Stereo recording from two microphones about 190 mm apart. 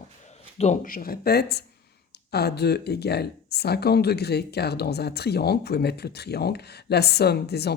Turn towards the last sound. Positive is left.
turn(degrees=60)  # may be behind; listen again after turning